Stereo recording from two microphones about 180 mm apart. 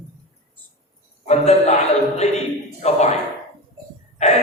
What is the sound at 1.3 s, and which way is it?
Speech, 35° left (ahead or behind).